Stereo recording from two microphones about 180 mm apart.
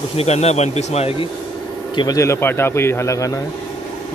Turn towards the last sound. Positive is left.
turn(degrees=20)  # may be behind; listen again after turning